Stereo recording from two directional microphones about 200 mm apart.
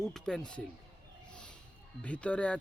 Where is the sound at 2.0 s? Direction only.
5° left (ahead or behind).